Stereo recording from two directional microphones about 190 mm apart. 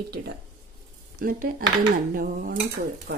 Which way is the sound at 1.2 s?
50° right (ahead or behind).